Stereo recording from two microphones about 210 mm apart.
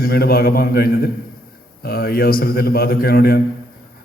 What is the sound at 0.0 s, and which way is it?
A man's voice, 45° left (ahead or behind).